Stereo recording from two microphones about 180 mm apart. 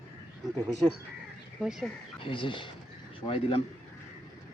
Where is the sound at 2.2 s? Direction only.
30° left (ahead or behind).